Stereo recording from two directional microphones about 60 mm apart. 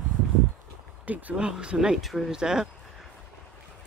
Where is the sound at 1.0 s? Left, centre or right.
Right.